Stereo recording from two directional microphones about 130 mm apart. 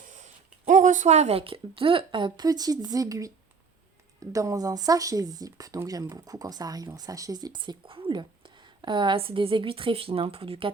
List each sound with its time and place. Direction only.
0.1 s speech: 65° right (ahead or behind); by 10.7 s 45° right (ahead or behind)